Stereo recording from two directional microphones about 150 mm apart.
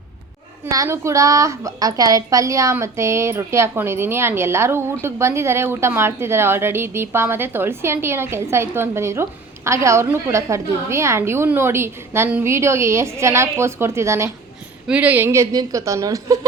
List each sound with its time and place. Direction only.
0.6 s a woman's voice: 20° right (ahead or behind)